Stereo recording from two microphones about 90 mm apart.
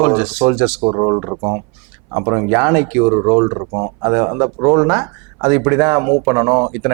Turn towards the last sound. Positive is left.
turn(degrees=-25)  # may be behind; listen again after turning